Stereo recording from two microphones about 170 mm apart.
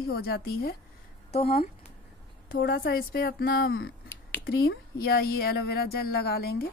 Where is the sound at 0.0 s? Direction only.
70° left (ahead or behind).